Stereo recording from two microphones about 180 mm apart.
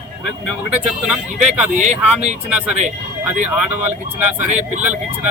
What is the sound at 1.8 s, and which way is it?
Speech, 40° right (ahead or behind).